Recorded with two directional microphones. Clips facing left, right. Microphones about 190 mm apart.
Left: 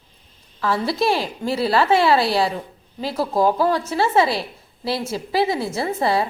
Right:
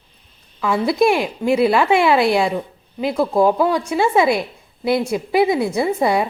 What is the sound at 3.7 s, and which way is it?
A woman's voice, 10° right (ahead or behind).